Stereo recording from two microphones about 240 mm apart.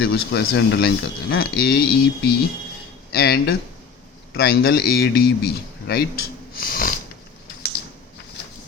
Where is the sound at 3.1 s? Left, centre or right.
Left.